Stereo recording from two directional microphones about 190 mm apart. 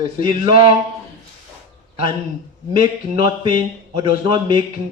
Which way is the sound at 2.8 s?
25° right (ahead or behind).